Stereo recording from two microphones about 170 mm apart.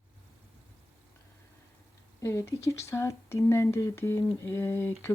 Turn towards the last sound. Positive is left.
turn(degrees=15)  # may be behind; listen again after turning